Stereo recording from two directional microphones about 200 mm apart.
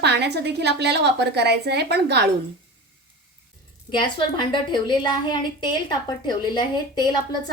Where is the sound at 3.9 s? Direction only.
25° left (ahead or behind).